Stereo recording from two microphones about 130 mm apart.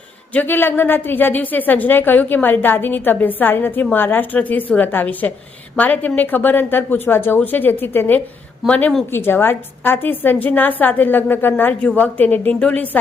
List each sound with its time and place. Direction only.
0.3 s a woman's voice: 15° left (ahead or behind)
9.1 s a woman's voice: 15° left (ahead or behind)